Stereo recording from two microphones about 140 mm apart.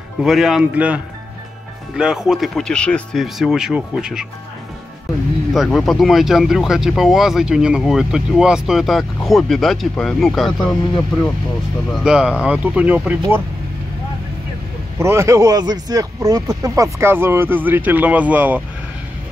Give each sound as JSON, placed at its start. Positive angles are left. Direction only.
{"t": 0.2, "sound": "speech", "side_deg": -5}
{"t": 5.5, "sound": "speech", "side_deg": 0}
{"t": 11.9, "sound": "speech", "side_deg": -5}
{"t": 15.0, "sound": "speech", "side_deg": -20}